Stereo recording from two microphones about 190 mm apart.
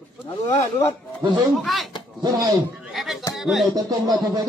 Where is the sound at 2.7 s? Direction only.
Centre (ahead or behind).